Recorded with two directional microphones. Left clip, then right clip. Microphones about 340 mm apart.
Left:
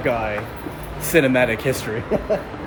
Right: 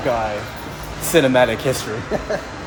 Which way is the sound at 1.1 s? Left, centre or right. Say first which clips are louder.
Right 2 dB; centre.